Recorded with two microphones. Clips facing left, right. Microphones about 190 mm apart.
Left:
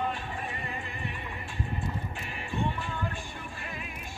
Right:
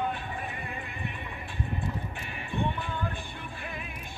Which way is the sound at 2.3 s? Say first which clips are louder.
Right 1 dB; 60° right (ahead or behind).